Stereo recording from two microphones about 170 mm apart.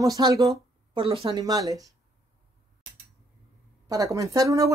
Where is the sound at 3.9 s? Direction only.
20° right (ahead or behind).